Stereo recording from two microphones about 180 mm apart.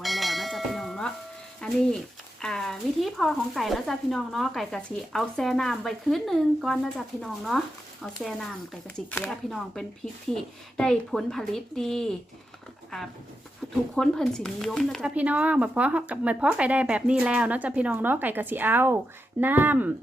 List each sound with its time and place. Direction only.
0.0 s bell: centre (ahead or behind)
1.6 s speech: 5° left (ahead or behind)
9.1 s speech: 10° left (ahead or behind)
9.5 s speech: centre (ahead or behind)
15.1 s a woman's voice: 10° right (ahead or behind)